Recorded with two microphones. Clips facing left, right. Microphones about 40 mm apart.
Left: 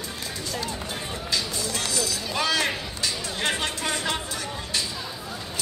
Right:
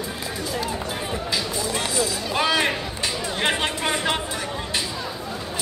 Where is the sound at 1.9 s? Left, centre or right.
Right.